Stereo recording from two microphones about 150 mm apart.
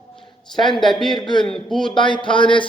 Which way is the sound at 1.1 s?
30° left (ahead or behind).